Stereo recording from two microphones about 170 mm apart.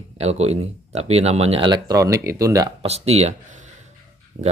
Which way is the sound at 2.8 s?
40° right (ahead or behind).